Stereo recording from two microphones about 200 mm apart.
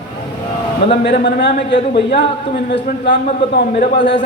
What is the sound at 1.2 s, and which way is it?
Speech, 60° left (ahead or behind).